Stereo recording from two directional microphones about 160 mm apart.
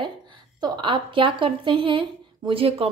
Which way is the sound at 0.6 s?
30° right (ahead or behind).